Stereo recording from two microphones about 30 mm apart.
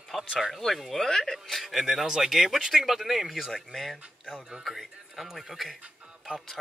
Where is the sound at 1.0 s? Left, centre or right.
Centre.